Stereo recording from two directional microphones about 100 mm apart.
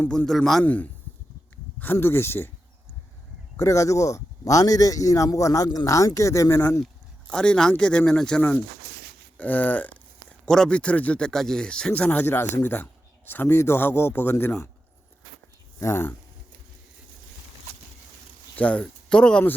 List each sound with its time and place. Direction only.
0.3 s a man's voice: 5° left (ahead or behind)
0.6 s speech: 15° left (ahead or behind)
3.6 s a man's voice: 30° left (ahead or behind)
7.3 s speech: 10° left (ahead or behind)
15.8 s speech: 25° left (ahead or behind)
18.5 s speech: 15° left (ahead or behind)